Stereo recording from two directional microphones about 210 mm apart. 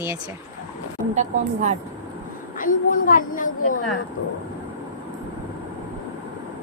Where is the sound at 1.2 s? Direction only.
35° right (ahead or behind).